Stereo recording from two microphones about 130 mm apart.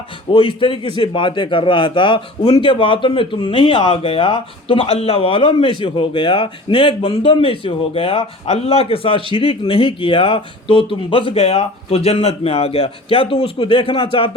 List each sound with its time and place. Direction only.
0.3 s a man's voice: 45° left (ahead or behind)